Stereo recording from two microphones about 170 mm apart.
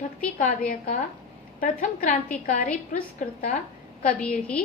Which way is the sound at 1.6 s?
50° left (ahead or behind).